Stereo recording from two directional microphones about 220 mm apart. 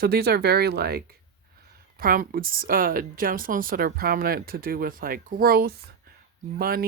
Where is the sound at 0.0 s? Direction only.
45° right (ahead or behind).